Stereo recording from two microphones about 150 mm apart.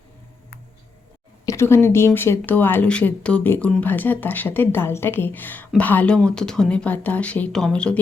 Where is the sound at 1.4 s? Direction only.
15° left (ahead or behind).